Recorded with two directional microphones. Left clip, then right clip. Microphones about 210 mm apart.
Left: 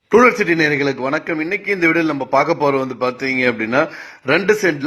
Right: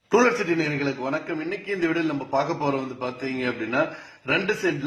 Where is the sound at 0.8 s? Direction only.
25° left (ahead or behind).